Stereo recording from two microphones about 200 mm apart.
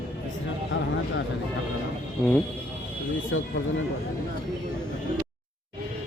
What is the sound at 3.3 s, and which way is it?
Speech, 75° left (ahead or behind).